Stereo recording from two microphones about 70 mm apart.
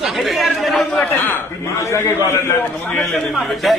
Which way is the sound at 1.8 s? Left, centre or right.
Left.